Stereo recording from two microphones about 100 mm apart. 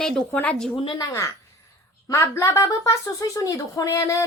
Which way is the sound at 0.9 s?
30° left (ahead or behind).